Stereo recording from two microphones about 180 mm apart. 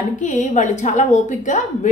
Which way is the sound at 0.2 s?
45° left (ahead or behind).